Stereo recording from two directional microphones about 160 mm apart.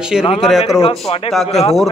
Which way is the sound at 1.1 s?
40° left (ahead or behind).